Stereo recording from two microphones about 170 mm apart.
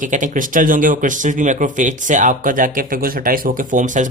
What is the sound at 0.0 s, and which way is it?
Speech, 50° right (ahead or behind).